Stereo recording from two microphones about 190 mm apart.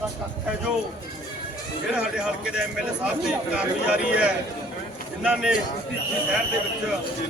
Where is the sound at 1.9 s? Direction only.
5° right (ahead or behind).